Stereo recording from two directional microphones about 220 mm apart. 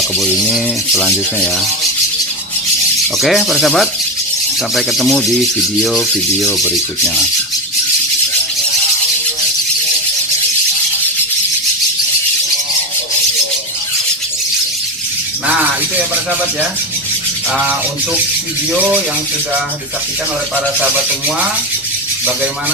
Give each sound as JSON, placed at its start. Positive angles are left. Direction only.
{"t": 0.9, "sound": "speech", "side_deg": 5}
{"t": 3.2, "sound": "speech", "side_deg": 0}